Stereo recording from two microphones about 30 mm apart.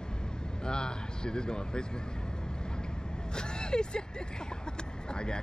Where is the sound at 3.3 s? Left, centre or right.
Left.